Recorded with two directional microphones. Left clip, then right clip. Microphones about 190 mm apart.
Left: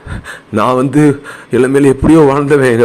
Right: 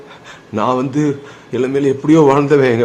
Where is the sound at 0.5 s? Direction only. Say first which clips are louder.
Left 5 dB; 30° left (ahead or behind).